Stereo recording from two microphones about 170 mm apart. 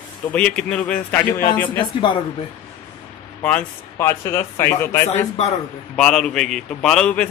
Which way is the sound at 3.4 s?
10° left (ahead or behind).